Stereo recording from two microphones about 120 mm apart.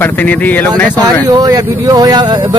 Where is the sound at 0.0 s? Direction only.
15° left (ahead or behind).